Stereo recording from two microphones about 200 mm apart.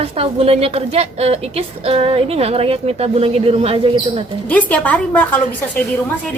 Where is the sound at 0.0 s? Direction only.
30° right (ahead or behind).